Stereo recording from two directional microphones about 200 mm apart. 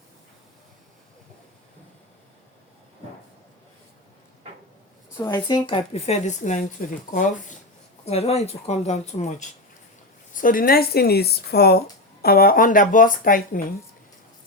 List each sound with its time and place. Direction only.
5.1 s speech: 15° left (ahead or behind); by 6.7 s 35° left (ahead or behind)
8.0 s speech: 30° left (ahead or behind)
10.3 s speech: 45° left (ahead or behind)